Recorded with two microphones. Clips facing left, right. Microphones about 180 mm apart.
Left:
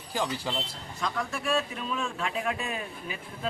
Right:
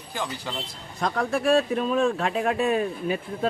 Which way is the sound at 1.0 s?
55° right (ahead or behind).